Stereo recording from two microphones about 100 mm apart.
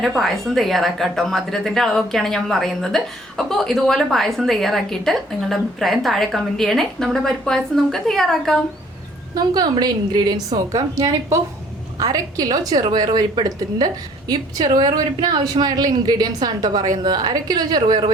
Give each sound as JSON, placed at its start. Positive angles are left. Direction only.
{"t": 0.2, "sound": "a woman's voice", "side_deg": 0}
{"t": 9.3, "sound": "a woman's voice", "side_deg": -40}